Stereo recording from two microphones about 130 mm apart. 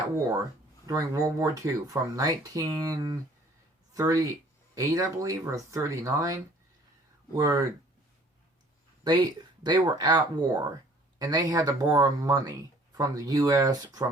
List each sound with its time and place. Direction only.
0.9 s speech: 25° right (ahead or behind)
9.0 s speech: 35° right (ahead or behind)